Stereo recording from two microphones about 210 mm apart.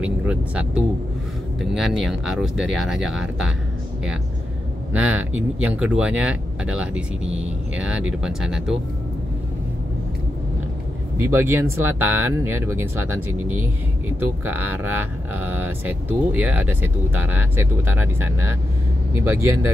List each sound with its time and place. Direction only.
0.0 s speech: 5° right (ahead or behind)
4.9 s speech: 5° right (ahead or behind)
11.1 s speech: 10° right (ahead or behind)